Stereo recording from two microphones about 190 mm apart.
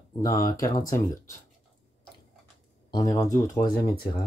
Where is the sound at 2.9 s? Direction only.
20° left (ahead or behind).